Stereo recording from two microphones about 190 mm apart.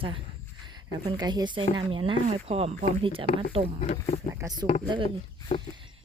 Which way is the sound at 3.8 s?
35° left (ahead or behind).